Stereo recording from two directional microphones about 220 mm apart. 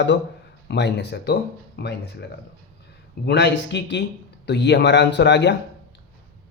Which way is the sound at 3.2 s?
50° left (ahead or behind).